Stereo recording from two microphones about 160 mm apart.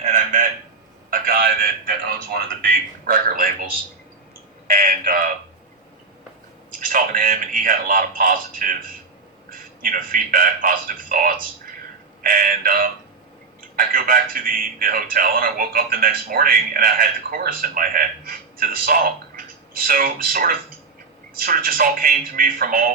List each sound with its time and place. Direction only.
0.0 s a sound: 50° right (ahead or behind)
1.1 s a man's voice: 65° right (ahead or behind)
4.7 s a man's voice: 60° right (ahead or behind)
6.7 s a man's voice: 55° right (ahead or behind)